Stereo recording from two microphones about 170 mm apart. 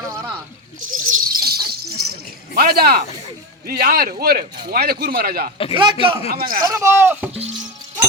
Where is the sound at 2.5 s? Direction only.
65° right (ahead or behind).